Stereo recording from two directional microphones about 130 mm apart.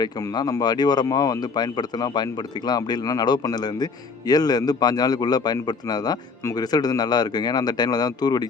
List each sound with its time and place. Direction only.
0.0 s a man's voice: 30° left (ahead or behind)